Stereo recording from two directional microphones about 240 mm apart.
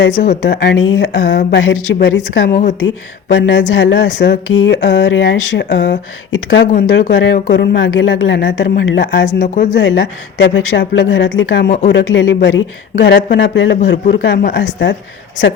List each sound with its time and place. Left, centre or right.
0.2 s speech: left
3.3 s speech: left